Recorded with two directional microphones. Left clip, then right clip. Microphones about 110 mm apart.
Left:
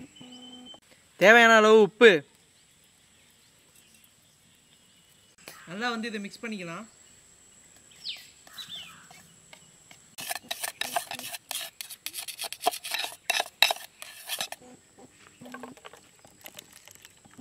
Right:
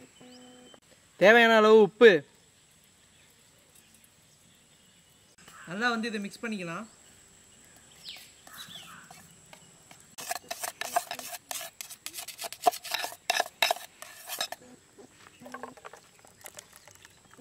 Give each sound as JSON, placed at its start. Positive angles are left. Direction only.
{"t": 1.1, "sound": "speech", "side_deg": 35}
{"t": 5.7, "sound": "speech", "side_deg": -5}
{"t": 8.5, "sound": "dog", "side_deg": -5}
{"t": 9.1, "sound": "a sound", "side_deg": -5}